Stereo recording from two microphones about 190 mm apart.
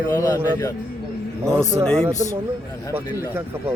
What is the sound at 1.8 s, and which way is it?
Speech, 5° left (ahead or behind).